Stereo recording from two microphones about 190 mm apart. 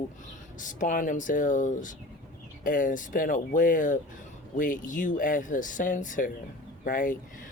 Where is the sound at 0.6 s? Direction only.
40° left (ahead or behind).